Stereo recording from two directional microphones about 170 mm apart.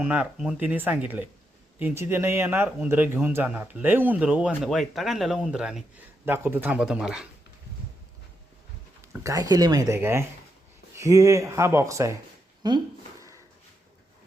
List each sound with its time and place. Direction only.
0.0 s a man's voice: 10° right (ahead or behind)
9.2 s a man's voice: 20° right (ahead or behind)
12.6 s a sound: 20° right (ahead or behind)